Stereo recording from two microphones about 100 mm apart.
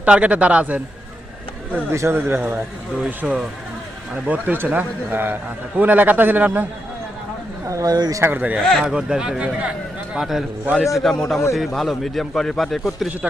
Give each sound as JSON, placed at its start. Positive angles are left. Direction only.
{"t": 0.0, "sound": "a man's voice", "side_deg": -15}
{"t": 1.7, "sound": "a man's voice", "side_deg": -25}
{"t": 7.7, "sound": "speech", "side_deg": -35}
{"t": 8.2, "sound": "a man's voice", "side_deg": -20}
{"t": 8.5, "sound": "a man's voice", "side_deg": 0}
{"t": 10.2, "sound": "a man's voice", "side_deg": 0}